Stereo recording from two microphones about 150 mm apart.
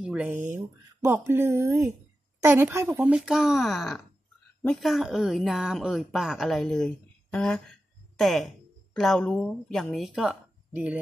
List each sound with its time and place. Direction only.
0.0 s a woman's voice: 10° right (ahead or behind)